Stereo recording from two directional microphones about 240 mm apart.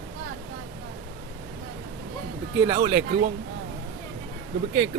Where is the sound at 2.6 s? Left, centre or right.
Right.